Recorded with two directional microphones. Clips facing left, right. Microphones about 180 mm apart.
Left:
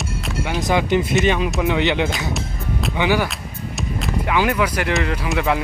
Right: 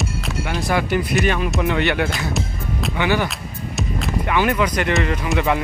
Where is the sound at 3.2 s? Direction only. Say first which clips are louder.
Right 1 dB; centre (ahead or behind).